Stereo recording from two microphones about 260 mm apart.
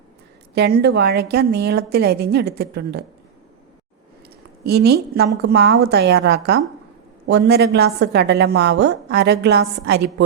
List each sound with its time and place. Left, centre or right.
0.5 s a woman's voice: right
4.6 s a woman's voice: right